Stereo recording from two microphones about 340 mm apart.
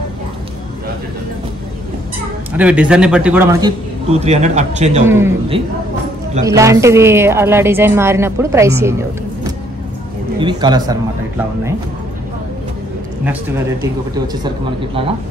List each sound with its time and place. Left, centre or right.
2.5 s a man's voice: centre
4.1 s a man's voice: centre
5.0 s a woman's voice: centre
10.6 s a woman's voice: centre
14.2 s a woman's voice: centre